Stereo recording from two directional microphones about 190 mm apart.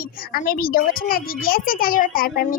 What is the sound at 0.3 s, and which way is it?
A child's voice, 50° left (ahead or behind).